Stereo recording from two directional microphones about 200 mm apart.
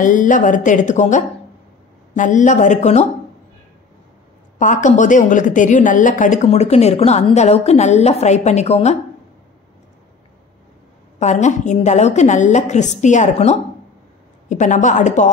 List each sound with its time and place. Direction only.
0.0 s a woman's voice: 40° left (ahead or behind)
4.6 s a woman's voice: 40° left (ahead or behind)
11.1 s a woman's voice: 35° left (ahead or behind)